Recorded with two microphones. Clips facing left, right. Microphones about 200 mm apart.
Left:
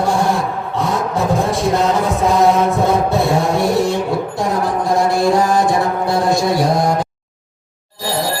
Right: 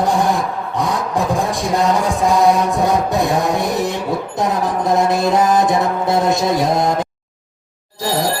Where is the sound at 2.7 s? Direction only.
15° right (ahead or behind).